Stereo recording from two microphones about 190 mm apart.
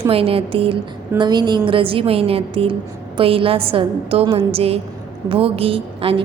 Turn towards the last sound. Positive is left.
turn(degrees=-30)  # may be behind; listen again after turning